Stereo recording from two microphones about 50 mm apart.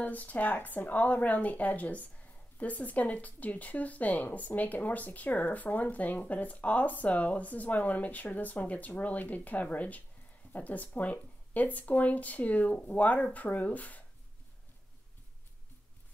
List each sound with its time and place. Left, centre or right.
0.0 s speech: left